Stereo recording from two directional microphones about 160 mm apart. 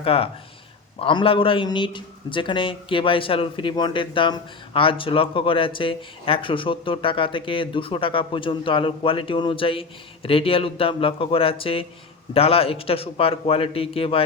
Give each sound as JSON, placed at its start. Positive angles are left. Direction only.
{"t": 0.0, "sound": "a man's voice", "side_deg": 35}